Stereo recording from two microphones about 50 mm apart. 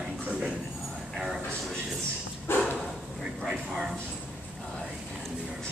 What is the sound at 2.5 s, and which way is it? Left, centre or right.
Dog, left.